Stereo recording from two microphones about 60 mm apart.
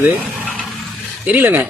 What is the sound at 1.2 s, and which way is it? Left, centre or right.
Speech, right.